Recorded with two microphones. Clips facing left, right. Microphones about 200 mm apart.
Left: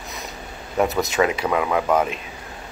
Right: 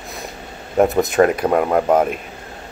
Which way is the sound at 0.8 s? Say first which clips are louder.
Right 6 dB; 50° right (ahead or behind).